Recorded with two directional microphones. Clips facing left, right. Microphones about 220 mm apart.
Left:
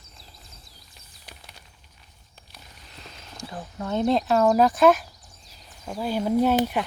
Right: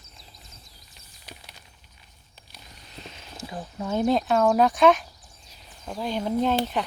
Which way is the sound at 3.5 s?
15° right (ahead or behind).